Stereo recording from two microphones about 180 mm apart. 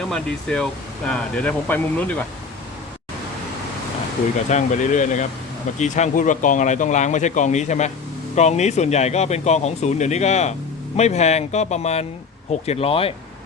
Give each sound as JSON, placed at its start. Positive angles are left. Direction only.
{"t": 0.1, "sound": "speech", "side_deg": 5}
{"t": 4.4, "sound": "speech", "side_deg": 40}